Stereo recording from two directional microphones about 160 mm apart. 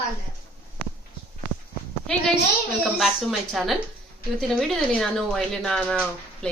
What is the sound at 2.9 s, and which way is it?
A man's voice, centre (ahead or behind).